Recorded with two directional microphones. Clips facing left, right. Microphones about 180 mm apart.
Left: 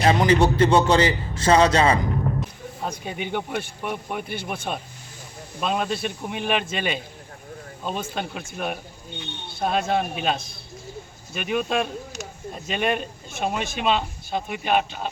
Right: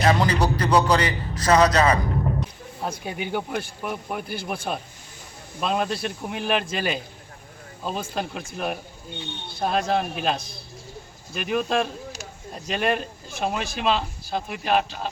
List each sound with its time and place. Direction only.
0.0 s a man's voice: 25° left (ahead or behind)
2.8 s speech: centre (ahead or behind)